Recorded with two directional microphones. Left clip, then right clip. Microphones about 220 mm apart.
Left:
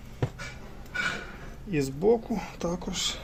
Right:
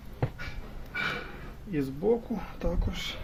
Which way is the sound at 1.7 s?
30° left (ahead or behind).